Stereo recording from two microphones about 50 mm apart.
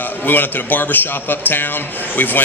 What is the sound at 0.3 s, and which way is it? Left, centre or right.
A man's voice, left.